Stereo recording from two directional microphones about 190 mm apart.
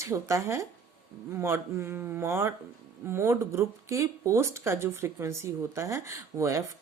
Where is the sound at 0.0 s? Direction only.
15° right (ahead or behind).